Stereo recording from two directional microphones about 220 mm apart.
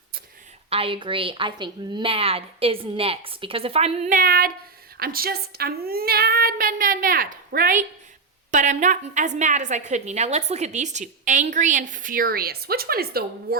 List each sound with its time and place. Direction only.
0.7 s a woman's voice: 25° right (ahead or behind); by 13.6 s 45° right (ahead or behind)